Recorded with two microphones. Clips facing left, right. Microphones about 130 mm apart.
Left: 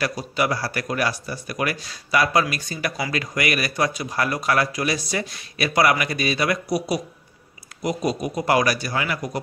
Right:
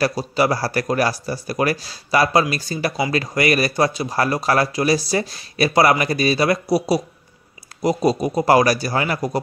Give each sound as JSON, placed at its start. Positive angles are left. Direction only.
{"t": 0.0, "sound": "speech", "side_deg": -35}